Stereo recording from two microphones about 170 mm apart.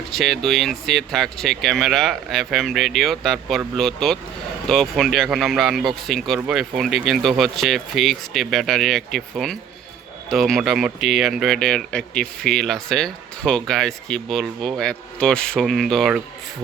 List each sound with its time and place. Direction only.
0.1 s speech: centre (ahead or behind)